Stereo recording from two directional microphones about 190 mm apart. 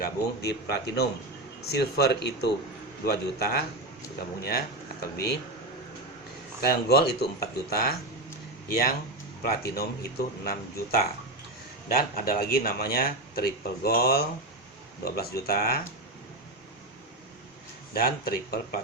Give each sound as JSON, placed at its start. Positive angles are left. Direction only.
{"t": 0.0, "sound": "speech", "side_deg": 60}
{"t": 6.6, "sound": "speech", "side_deg": 55}
{"t": 17.9, "sound": "speech", "side_deg": 50}